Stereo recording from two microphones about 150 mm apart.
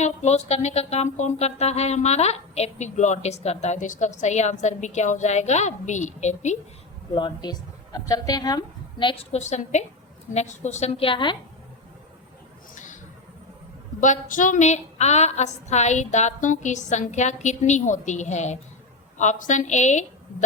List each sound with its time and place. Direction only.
0.0 s music: 50° left (ahead or behind)
7.1 s a woman's voice: 30° left (ahead or behind)
9.3 s music: 50° left (ahead or behind); by 11.3 s 35° left (ahead or behind)
12.7 s a sound: 60° left (ahead or behind)
14.0 s music: 60° left (ahead or behind)